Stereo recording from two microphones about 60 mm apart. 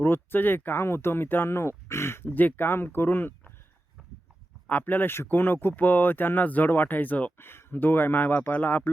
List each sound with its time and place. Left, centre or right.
0.0 s speech: left
2.6 s speech: left
4.7 s speech: left
7.3 s speech: left